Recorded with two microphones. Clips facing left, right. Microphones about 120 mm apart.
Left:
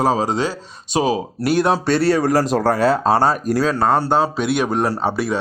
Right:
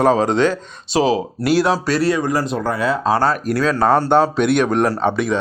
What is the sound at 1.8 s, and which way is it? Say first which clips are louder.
Speech: left 1 dB; 30° left (ahead or behind).